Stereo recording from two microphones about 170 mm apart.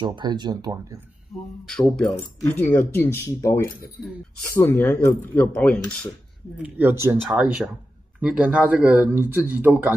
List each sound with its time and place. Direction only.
0.0 s speech: 25° right (ahead or behind)
1.7 s speech: 5° left (ahead or behind)
6.6 s speech: 10° right (ahead or behind)